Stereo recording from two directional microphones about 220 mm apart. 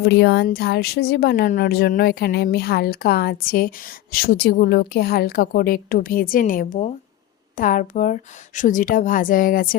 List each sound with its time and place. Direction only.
0.0 s a woman's voice: 50° left (ahead or behind)